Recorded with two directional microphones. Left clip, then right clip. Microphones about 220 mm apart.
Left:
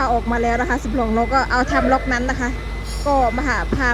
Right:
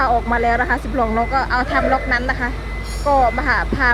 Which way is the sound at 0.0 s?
15° left (ahead or behind).